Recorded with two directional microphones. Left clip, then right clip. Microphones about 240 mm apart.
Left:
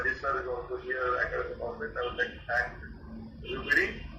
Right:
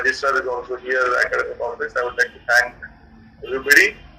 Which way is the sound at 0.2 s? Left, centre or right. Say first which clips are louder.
Right 12 dB; right.